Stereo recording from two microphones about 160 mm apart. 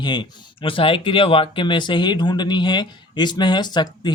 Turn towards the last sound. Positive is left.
turn(degrees=25)  # may be behind; listen again after turning